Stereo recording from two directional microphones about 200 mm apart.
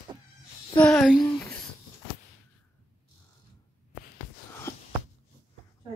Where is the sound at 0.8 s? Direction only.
5° left (ahead or behind).